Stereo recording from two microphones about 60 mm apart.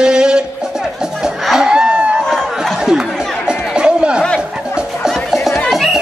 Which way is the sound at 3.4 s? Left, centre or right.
Centre.